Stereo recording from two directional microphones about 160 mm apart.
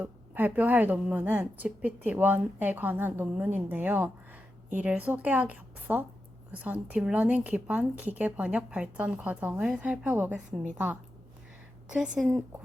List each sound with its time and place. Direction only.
0.0 s a woman's voice: 10° right (ahead or behind)
11.9 s a woman's voice: 5° right (ahead or behind)